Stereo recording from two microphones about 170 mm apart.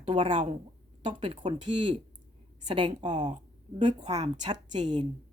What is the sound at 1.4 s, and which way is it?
Speech, 30° right (ahead or behind).